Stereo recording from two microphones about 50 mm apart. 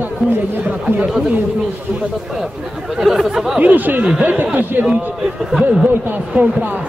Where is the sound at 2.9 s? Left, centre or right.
Centre.